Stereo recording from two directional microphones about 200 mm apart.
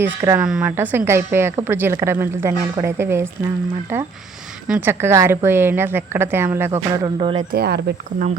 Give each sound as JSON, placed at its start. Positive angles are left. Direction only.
{"t": 0.0, "sound": "a woman's voice", "side_deg": -10}
{"t": 4.7, "sound": "a woman's voice", "side_deg": -10}
{"t": 7.5, "sound": "speech", "side_deg": -55}